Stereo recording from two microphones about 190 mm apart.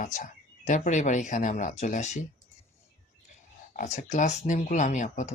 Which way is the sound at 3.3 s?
40° left (ahead or behind).